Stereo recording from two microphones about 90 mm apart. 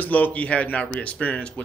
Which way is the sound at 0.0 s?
20° left (ahead or behind).